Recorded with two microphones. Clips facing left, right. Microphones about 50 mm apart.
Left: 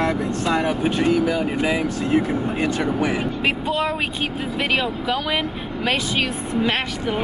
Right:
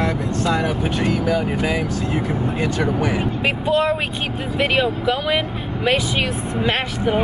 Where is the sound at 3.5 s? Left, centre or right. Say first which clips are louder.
Right 4 dB; centre.